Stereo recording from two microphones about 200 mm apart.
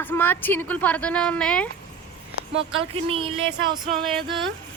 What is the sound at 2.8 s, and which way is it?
Speech, 25° right (ahead or behind).